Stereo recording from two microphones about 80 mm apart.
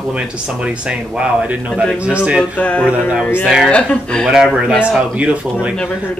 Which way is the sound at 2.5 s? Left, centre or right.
Centre.